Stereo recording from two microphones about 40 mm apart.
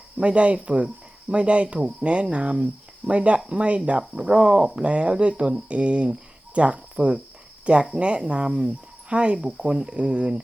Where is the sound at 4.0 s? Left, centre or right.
Centre.